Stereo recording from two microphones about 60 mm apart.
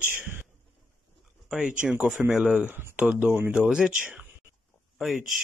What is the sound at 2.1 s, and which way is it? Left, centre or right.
Speech, centre.